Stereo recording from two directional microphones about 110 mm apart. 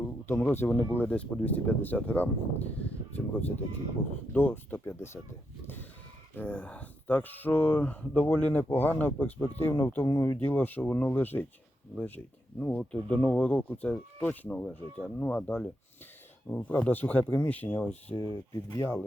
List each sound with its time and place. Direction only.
0.3 s speech: 15° left (ahead or behind)
6.3 s speech: 15° left (ahead or behind)
18.2 s speech: 35° left (ahead or behind)